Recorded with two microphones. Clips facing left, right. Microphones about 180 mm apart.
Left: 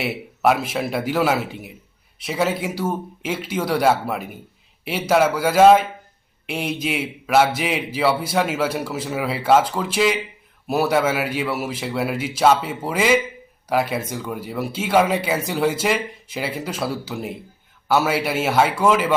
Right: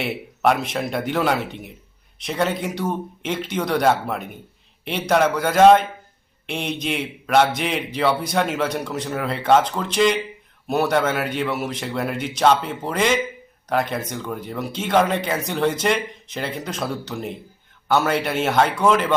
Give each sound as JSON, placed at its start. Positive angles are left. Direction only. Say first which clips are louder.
{"t": 0.0, "sound": "a man's voice", "louder": "left 1 dB", "side_deg": 5}